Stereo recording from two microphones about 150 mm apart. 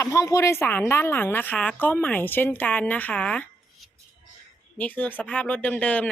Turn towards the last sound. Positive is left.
turn(degrees=10)  # may be behind; listen again after turning